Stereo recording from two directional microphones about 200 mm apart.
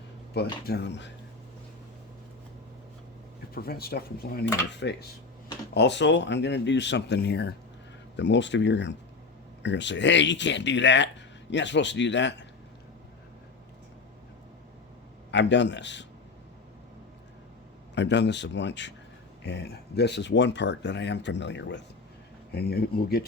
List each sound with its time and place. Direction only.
0.3 s speech: 55° left (ahead or behind)
3.5 s speech: 50° left (ahead or behind)
15.3 s speech: 60° left (ahead or behind)
17.9 s speech: 60° left (ahead or behind)
22.5 s speech: 50° left (ahead or behind)